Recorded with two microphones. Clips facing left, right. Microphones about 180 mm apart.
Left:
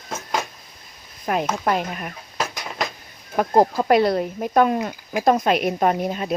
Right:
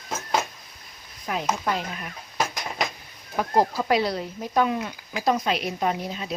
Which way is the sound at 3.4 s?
50° left (ahead or behind).